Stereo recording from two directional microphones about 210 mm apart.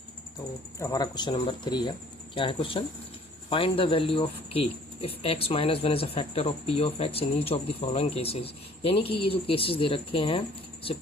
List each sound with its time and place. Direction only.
0.8 s speech: 15° left (ahead or behind)